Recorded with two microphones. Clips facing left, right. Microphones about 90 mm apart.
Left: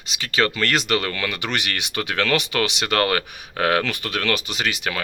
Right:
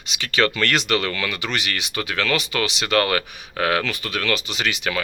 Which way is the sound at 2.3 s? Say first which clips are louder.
Left 1 dB; 60° left (ahead or behind).